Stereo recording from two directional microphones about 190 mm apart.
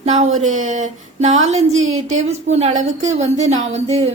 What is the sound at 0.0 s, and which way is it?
A woman's voice, 35° right (ahead or behind).